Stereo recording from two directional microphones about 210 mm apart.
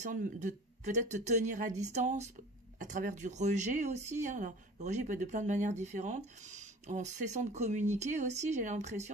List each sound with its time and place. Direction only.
0.0 s speech: 35° right (ahead or behind)